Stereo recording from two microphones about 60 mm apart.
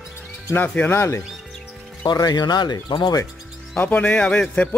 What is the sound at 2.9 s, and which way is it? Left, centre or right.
Speech, left.